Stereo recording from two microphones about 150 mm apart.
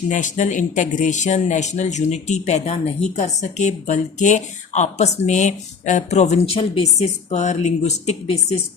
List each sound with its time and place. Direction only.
0.1 s speech: 55° left (ahead or behind)